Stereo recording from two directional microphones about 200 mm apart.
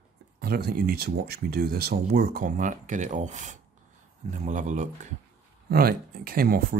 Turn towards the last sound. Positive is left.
turn(degrees=-45)  # may be behind; listen again after turning